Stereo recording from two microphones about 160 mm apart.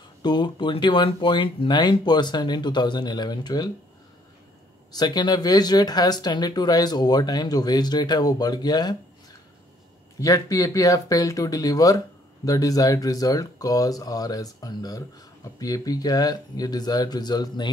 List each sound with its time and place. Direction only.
0.2 s speech: 30° left (ahead or behind)
4.9 s speech: 25° left (ahead or behind)
10.2 s speech: 20° left (ahead or behind)